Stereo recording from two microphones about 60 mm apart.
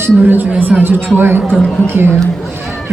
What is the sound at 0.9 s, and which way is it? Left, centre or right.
Speech, right.